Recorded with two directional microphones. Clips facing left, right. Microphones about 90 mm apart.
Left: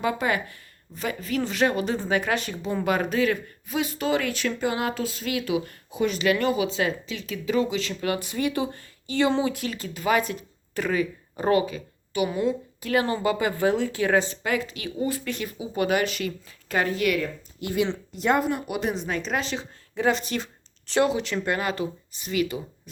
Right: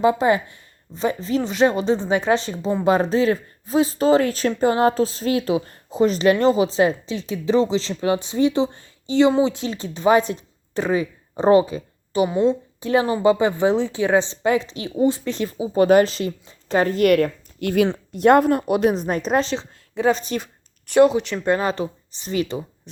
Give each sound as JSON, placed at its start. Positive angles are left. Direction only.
{"t": 0.0, "sound": "a woman's voice", "side_deg": -25}
{"t": 19.4, "sound": "speech", "side_deg": -25}
{"t": 21.4, "sound": "speech", "side_deg": -25}